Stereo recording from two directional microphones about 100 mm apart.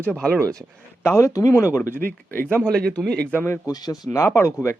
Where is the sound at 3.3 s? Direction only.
25° left (ahead or behind).